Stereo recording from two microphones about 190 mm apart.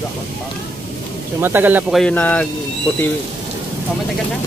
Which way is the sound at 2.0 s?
5° left (ahead or behind).